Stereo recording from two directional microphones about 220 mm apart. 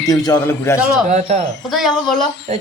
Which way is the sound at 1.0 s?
35° right (ahead or behind).